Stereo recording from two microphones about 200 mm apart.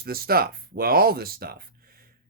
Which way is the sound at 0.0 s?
50° right (ahead or behind).